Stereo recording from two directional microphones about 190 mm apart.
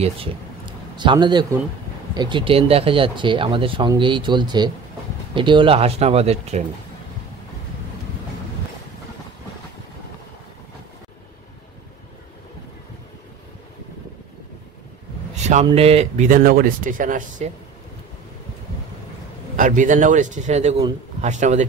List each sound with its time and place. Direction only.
0.0 s speech: 30° right (ahead or behind)
15.3 s a sound: 35° right (ahead or behind)
15.6 s speech: 30° right (ahead or behind)
19.5 s speech: 45° right (ahead or behind)